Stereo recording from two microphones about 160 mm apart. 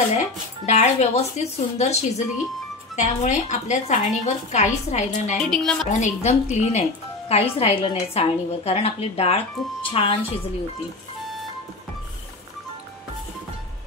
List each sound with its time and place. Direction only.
0.2 s a woman's voice: 45° left (ahead or behind)
5.4 s a woman's voice: 5° left (ahead or behind)
5.9 s speech: 45° left (ahead or behind)